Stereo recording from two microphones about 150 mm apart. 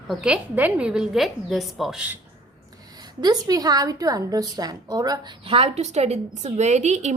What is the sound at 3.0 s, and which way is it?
A woman's voice, 25° right (ahead or behind).